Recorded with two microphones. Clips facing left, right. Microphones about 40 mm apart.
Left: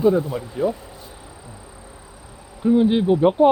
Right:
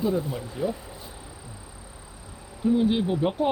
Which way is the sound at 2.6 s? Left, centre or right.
Centre.